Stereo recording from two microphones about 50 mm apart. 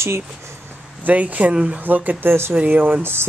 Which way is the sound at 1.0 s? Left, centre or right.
Right.